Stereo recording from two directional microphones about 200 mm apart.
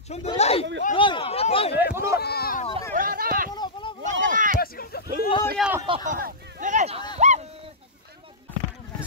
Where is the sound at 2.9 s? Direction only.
45° right (ahead or behind).